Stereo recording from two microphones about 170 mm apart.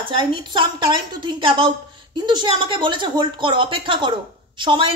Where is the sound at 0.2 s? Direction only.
30° right (ahead or behind).